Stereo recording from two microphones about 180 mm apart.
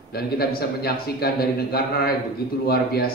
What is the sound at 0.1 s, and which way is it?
A man's voice, 60° left (ahead or behind).